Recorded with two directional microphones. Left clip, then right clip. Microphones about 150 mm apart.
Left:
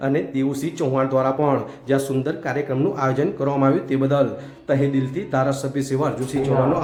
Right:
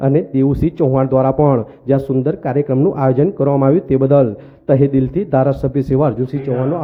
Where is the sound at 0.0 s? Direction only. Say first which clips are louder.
Right 7 dB; 45° right (ahead or behind).